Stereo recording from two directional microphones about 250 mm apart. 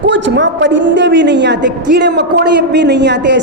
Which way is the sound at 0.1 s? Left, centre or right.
Right.